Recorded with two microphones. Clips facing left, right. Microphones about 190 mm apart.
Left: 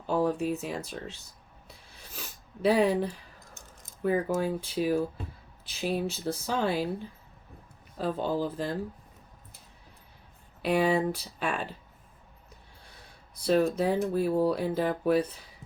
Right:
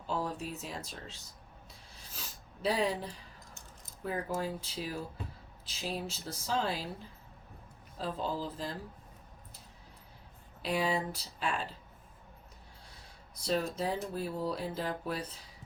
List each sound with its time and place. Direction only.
0.1 s speech: 60° left (ahead or behind)
2.1 s a sound: 60° left (ahead or behind)
4.0 s speech: 60° left (ahead or behind)
7.9 s speech: 60° left (ahead or behind)
10.6 s speech: 60° left (ahead or behind)
13.5 s speech: 60° left (ahead or behind)